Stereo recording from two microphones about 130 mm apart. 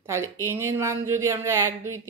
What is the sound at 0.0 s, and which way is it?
Speech, 20° right (ahead or behind).